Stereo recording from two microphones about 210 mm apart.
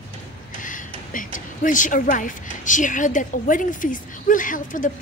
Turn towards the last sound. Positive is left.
turn(degrees=40)  # may be behind; listen again after turning